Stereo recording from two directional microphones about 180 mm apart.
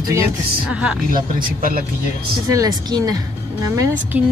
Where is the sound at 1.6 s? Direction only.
50° right (ahead or behind).